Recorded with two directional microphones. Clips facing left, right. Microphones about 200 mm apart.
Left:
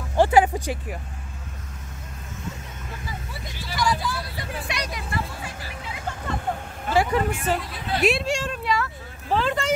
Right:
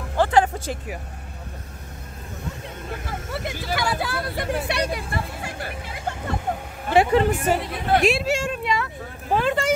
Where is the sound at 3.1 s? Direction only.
70° right (ahead or behind).